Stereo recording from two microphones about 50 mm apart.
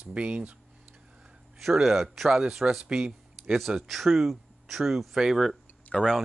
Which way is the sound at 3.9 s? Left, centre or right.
Centre.